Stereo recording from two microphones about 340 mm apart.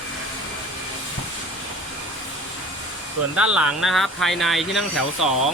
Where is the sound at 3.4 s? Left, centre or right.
Centre.